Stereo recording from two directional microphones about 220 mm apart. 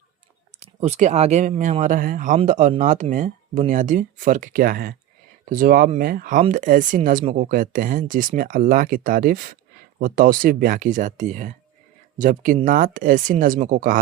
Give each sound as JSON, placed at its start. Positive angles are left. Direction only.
{"t": 0.6, "sound": "speech", "side_deg": -30}